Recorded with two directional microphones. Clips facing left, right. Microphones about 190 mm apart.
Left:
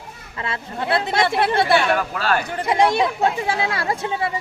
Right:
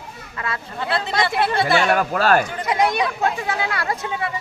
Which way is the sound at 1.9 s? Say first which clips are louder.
Right 3 dB; 45° right (ahead or behind).